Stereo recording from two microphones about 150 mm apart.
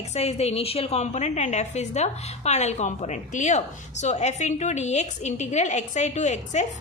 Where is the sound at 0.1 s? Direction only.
45° left (ahead or behind).